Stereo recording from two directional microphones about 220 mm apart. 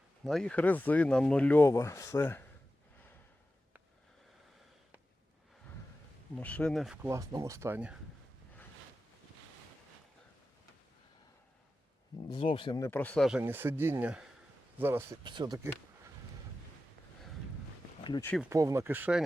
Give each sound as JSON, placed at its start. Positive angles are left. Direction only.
{"t": 0.3, "sound": "speech", "side_deg": 5}
{"t": 6.3, "sound": "speech", "side_deg": 5}
{"t": 12.3, "sound": "speech", "side_deg": 25}
{"t": 18.0, "sound": "speech", "side_deg": 20}
{"t": 18.4, "sound": "speech", "side_deg": -15}